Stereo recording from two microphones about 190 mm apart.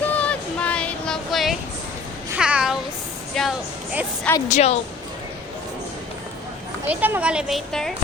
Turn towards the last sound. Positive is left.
turn(degrees=0)  # may be behind; listen again after turning